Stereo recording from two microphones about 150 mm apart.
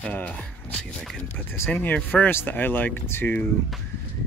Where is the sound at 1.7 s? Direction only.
10° left (ahead or behind).